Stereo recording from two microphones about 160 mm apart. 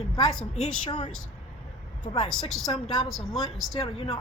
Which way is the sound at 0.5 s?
45° left (ahead or behind).